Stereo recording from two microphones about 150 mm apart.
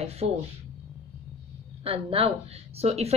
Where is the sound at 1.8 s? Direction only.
40° right (ahead or behind).